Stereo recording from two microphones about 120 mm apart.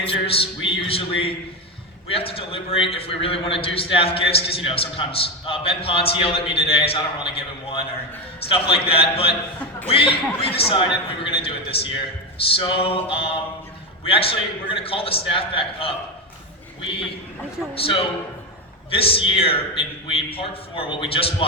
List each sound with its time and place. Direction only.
0.0 s a man's voice: 50° left (ahead or behind)
17.7 s a man's voice: 50° left (ahead or behind)